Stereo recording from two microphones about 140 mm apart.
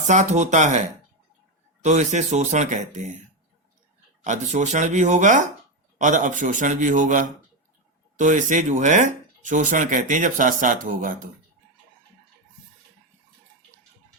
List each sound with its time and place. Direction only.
0.1 s speech: 60° right (ahead or behind)
1.8 s speech: 55° right (ahead or behind)
4.2 s speech: 55° right (ahead or behind); by 11.3 s 75° right (ahead or behind)